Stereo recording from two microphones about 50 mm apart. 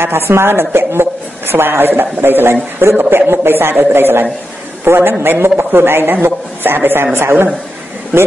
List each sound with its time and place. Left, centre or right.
0.0 s a woman's voice: right